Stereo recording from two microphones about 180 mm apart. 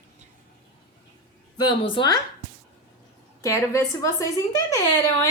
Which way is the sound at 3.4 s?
15° left (ahead or behind).